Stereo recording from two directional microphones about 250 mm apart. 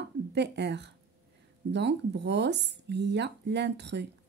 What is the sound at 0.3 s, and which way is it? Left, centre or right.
Speech, right.